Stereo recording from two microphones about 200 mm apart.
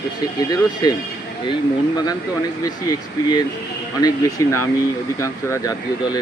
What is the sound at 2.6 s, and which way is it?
Speech, 20° left (ahead or behind).